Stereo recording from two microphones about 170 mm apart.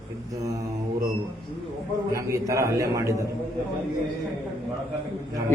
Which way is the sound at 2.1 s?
15° right (ahead or behind).